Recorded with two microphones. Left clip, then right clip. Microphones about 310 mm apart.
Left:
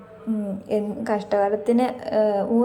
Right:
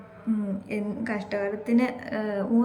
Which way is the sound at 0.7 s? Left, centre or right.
Centre.